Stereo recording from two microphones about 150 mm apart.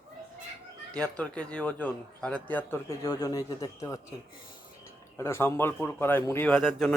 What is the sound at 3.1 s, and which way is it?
Speech, 25° left (ahead or behind).